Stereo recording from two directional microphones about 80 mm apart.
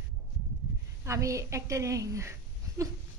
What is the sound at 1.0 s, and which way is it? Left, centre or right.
A woman's voice, right.